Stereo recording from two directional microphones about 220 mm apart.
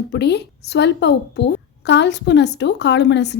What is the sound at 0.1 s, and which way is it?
A woman's voice, 50° left (ahead or behind).